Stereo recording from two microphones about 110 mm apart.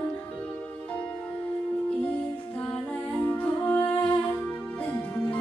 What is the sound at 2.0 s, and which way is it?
Music, 10° left (ahead or behind).